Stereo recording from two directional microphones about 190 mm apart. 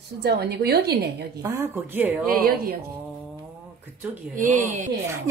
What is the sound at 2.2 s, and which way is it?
Speech, 55° right (ahead or behind).